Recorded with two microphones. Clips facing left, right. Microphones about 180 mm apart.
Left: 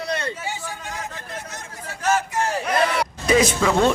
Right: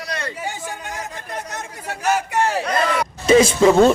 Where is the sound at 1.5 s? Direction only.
65° right (ahead or behind).